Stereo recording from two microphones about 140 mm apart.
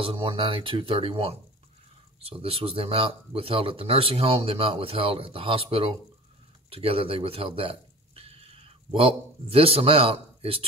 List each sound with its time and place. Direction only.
0.0 s speech: 40° right (ahead or behind)